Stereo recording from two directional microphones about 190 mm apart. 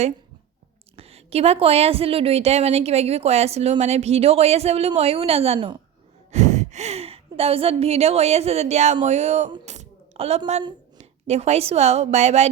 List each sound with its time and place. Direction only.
0.9 s a woman's voice: 30° right (ahead or behind)
6.3 s a woman's voice: 40° right (ahead or behind)